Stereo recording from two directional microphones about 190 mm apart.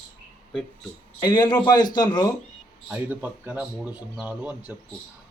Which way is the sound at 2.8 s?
10° right (ahead or behind).